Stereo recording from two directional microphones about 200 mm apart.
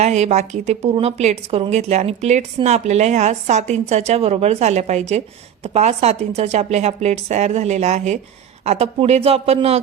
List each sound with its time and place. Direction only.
0.0 s a woman's voice: 35° right (ahead or behind)